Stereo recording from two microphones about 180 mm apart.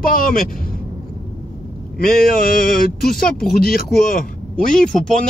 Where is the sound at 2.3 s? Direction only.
55° left (ahead or behind).